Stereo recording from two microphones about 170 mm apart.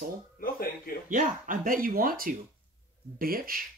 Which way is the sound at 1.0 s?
50° right (ahead or behind).